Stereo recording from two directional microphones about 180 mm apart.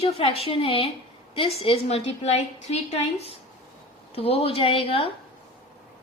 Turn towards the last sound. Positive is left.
turn(degrees=30)  # may be behind; listen again after turning